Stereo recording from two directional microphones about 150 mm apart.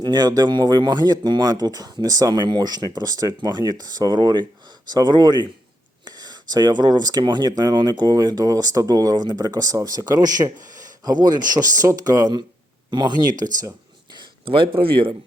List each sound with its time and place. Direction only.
0.0 s speech: 25° right (ahead or behind)
13.6 s a sound: 25° right (ahead or behind)
14.8 s speech: 35° right (ahead or behind)